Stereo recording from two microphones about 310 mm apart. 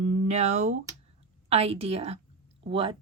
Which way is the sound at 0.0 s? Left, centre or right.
Right.